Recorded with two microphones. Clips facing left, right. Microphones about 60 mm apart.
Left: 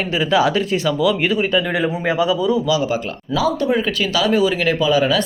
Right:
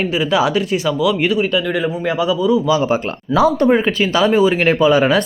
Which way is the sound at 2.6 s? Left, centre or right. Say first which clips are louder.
Right 3 dB; right.